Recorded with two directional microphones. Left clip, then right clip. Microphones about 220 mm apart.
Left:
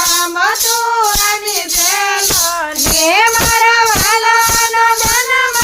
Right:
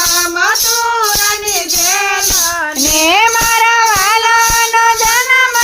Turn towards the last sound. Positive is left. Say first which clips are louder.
# right 1 dB
turn(degrees=-25)  # may be behind; listen again after turning